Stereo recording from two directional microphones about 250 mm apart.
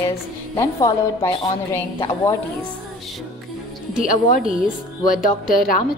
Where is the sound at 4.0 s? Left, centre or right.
Left.